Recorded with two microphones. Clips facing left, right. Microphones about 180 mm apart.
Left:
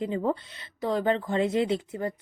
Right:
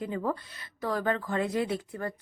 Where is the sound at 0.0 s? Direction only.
25° left (ahead or behind).